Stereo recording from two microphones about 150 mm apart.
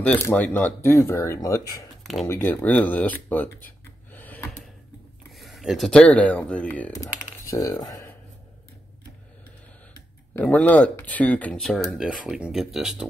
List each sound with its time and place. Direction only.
0.0 s speech: 10° left (ahead or behind)
4.1 s a sound: 10° left (ahead or behind)
5.3 s speech: centre (ahead or behind)
7.4 s speech: 20° left (ahead or behind)
10.3 s speech: 10° left (ahead or behind)